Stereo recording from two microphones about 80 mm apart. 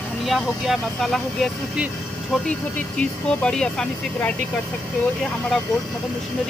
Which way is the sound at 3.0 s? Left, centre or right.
Centre.